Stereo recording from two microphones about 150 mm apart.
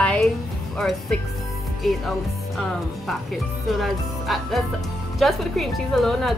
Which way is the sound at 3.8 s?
Centre (ahead or behind).